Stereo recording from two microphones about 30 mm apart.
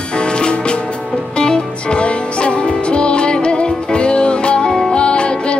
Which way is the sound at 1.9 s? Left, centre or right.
Left.